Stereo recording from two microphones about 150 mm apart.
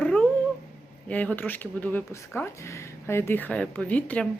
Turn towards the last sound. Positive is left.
turn(degrees=10)  # may be behind; listen again after turning